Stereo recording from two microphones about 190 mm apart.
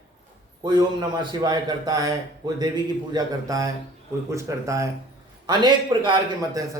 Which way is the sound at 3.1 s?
20° right (ahead or behind).